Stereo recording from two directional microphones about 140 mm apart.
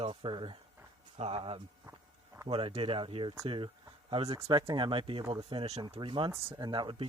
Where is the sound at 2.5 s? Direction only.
40° right (ahead or behind).